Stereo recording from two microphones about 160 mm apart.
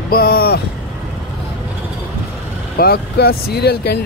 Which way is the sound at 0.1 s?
70° left (ahead or behind).